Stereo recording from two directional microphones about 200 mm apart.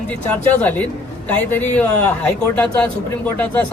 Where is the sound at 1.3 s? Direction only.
10° left (ahead or behind).